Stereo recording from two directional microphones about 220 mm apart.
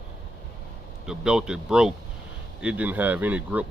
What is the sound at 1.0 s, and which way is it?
Speech, 5° right (ahead or behind).